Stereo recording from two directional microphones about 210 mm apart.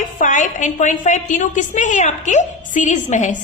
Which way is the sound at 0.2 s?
40° left (ahead or behind).